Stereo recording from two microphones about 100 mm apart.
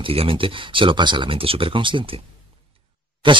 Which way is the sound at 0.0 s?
70° right (ahead or behind).